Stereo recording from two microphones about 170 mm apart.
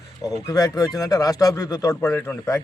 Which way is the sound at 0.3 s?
20° left (ahead or behind).